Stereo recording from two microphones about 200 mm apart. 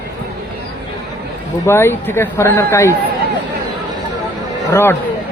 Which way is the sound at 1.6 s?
10° left (ahead or behind).